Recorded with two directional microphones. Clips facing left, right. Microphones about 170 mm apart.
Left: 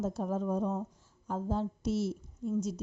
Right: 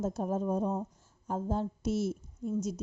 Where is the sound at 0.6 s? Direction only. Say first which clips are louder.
Right 1 dB; 20° right (ahead or behind).